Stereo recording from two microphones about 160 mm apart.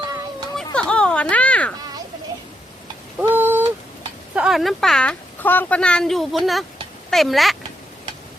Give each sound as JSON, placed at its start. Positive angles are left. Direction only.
{"t": 0.0, "sound": "children playing", "side_deg": -25}
{"t": 0.5, "sound": "children playing", "side_deg": 5}
{"t": 3.2, "sound": "a sound", "side_deg": -15}
{"t": 4.4, "sound": "speech", "side_deg": 0}